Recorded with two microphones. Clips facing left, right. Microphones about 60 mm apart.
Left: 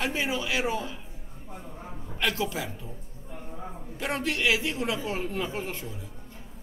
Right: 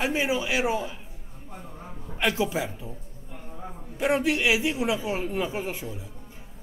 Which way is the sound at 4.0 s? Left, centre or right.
Centre.